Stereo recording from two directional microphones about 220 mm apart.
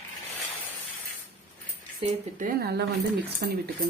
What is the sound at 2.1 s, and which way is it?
Speech, 40° right (ahead or behind).